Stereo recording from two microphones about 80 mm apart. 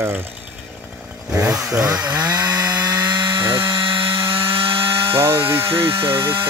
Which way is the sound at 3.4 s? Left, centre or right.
Right.